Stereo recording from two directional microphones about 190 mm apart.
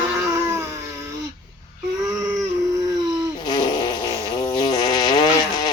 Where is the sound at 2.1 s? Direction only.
15° right (ahead or behind).